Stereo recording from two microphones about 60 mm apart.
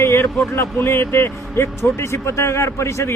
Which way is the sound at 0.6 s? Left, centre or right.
Left.